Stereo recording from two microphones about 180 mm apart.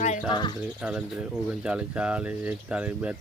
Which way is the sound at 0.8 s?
5° right (ahead or behind).